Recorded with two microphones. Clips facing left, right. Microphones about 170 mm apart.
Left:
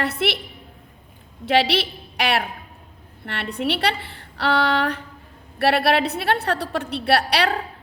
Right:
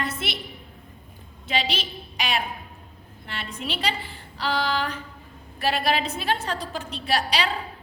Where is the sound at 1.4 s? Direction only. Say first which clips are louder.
Left 8 dB; 70° left (ahead or behind).